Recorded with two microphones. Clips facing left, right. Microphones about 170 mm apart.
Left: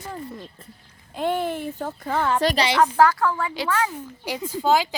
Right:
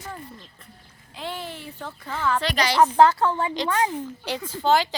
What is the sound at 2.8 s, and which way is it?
Speech, 25° right (ahead or behind).